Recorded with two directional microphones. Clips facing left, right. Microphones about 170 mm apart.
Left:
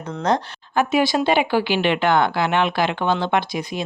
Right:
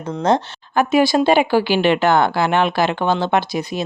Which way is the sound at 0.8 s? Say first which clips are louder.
Right 4 dB; 45° right (ahead or behind).